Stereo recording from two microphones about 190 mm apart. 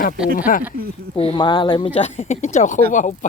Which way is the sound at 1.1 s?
25° left (ahead or behind).